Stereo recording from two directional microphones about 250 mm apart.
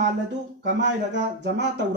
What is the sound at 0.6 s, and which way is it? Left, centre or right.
Speech, right.